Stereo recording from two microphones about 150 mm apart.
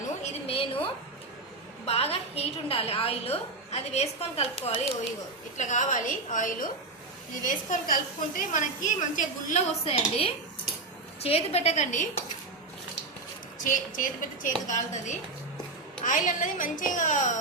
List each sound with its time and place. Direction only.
0.2 s a sound: 45° left (ahead or behind)
1.8 s a woman's voice: 40° left (ahead or behind)
5.5 s a woman's voice: 55° left (ahead or behind)
9.8 s a woman's voice: 40° left (ahead or behind)
13.7 s a woman's voice: 65° left (ahead or behind)